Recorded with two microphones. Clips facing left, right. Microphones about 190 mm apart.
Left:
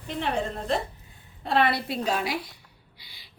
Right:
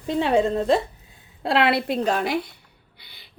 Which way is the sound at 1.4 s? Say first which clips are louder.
Right 4 dB; 85° right.